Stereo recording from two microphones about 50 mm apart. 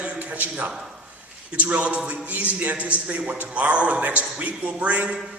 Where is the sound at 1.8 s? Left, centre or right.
Right.